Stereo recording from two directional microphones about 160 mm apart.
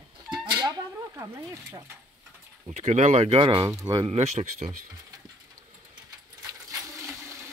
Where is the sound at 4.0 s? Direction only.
40° right (ahead or behind).